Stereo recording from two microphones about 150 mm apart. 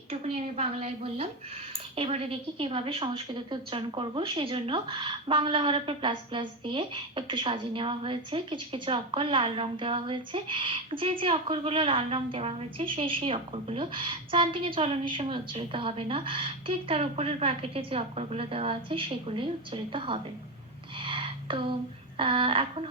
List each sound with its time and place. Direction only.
0.1 s a woman's voice: 45° right (ahead or behind)
21.0 s a sound: 35° right (ahead or behind)
22.2 s a woman's voice: 35° right (ahead or behind)